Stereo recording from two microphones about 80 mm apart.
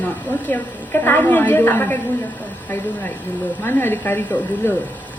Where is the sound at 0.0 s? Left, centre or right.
Left.